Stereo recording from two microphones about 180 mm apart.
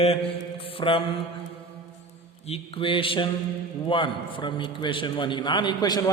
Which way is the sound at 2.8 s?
30° left (ahead or behind).